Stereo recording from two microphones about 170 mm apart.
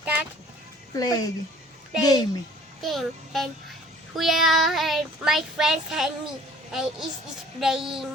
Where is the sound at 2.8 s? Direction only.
Centre (ahead or behind).